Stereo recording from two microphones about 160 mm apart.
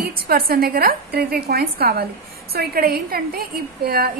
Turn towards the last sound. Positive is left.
turn(degrees=-70)  # may be behind; listen again after turning